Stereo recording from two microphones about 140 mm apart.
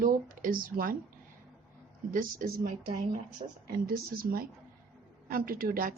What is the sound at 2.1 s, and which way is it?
Speech, 80° right.